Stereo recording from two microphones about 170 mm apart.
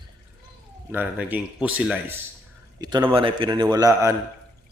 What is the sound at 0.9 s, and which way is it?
Speech, 10° right (ahead or behind).